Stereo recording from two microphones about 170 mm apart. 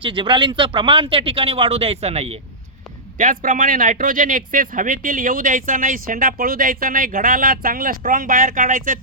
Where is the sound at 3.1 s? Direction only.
50° right (ahead or behind).